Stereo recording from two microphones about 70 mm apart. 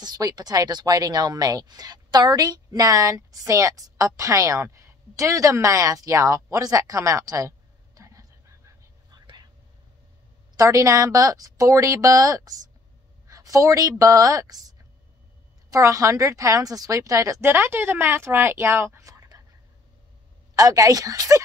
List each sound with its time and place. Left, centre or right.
0.0 s speech: right
10.5 s a woman's voice: right
15.7 s a woman's voice: right
17.4 s a woman's voice: right
20.5 s speech: right